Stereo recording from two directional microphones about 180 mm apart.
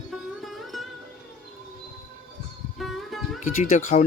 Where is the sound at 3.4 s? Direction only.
45° left (ahead or behind).